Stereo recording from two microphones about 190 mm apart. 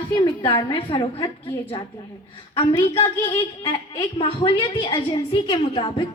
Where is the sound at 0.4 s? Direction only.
30° left (ahead or behind).